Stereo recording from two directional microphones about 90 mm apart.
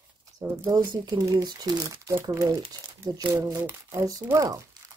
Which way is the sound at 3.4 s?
35° right (ahead or behind).